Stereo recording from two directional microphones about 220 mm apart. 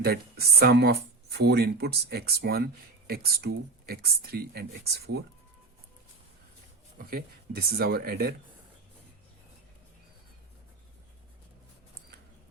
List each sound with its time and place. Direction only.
0.0 s speech: 45° right (ahead or behind)
7.0 s speech: 45° right (ahead or behind)